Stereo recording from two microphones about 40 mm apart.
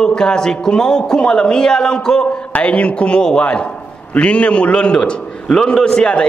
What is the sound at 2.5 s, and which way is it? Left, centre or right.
A man's voice, left.